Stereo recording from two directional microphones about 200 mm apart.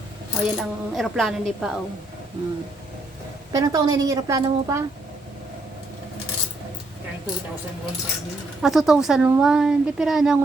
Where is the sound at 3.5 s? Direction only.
20° right (ahead or behind).